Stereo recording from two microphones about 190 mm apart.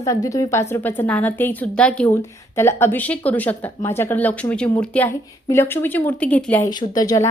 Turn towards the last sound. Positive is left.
turn(degrees=20)  # may be behind; listen again after turning